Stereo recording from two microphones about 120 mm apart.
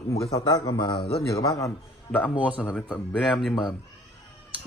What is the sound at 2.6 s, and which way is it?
Speech, 10° left (ahead or behind).